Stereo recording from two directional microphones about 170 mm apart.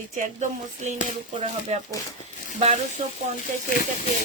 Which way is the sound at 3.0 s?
50° right (ahead or behind).